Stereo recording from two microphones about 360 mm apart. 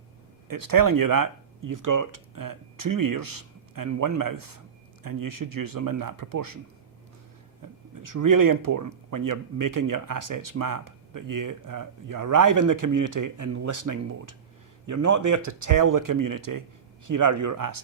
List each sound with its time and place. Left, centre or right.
0.4 s speech: right
7.6 s a sound: right
8.0 s speech: right